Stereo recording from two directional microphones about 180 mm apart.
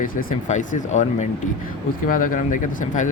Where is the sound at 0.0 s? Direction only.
50° left (ahead or behind).